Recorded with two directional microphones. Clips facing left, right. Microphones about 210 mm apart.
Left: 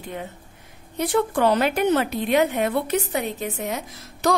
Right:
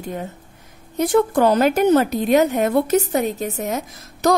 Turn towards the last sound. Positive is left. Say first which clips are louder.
# right 4 dB
turn(degrees=-45)  # may be behind; listen again after turning